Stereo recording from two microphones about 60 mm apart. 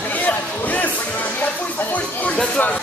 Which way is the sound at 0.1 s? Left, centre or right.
Left.